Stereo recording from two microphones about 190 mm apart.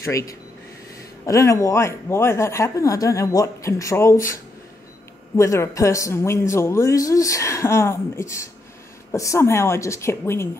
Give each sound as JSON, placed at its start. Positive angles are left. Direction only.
{"t": 0.0, "sound": "speech", "side_deg": 15}
{"t": 5.4, "sound": "speech", "side_deg": 15}